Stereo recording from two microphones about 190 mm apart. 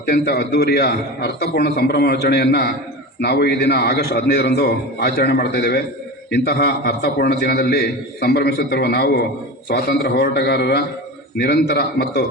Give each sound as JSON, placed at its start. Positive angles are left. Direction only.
{"t": 0.1, "sound": "a man's voice", "side_deg": 55}